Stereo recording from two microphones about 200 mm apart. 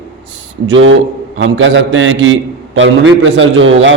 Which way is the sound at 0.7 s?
70° right (ahead or behind).